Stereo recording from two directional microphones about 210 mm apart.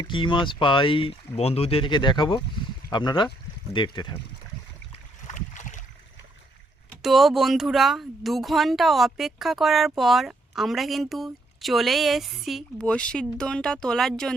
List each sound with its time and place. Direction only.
0.0 s speech: 25° left (ahead or behind)
5.3 s boat: 35° left (ahead or behind)
7.0 s speech: centre (ahead or behind)